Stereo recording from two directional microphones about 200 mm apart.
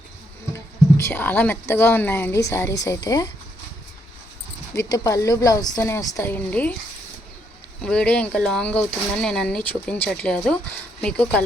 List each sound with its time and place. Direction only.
0.5 s speech: 15° left (ahead or behind)
4.7 s speech: 15° left (ahead or behind)
7.8 s speech: 5° left (ahead or behind)